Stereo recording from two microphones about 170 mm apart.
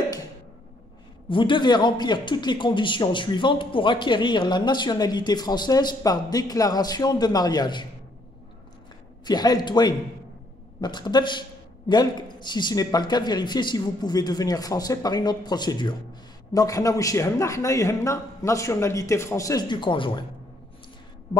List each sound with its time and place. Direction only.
1.3 s a man's voice: 30° left (ahead or behind)
9.2 s a man's voice: 25° left (ahead or behind)